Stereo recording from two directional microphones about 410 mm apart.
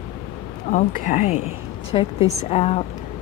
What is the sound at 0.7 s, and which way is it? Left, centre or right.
Speech, centre.